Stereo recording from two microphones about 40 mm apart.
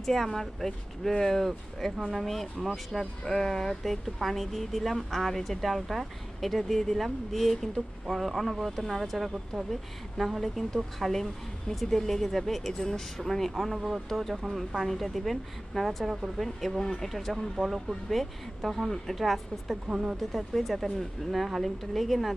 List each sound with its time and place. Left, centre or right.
0.0 s speech: centre
19.9 s speech: centre
20.3 s speech: centre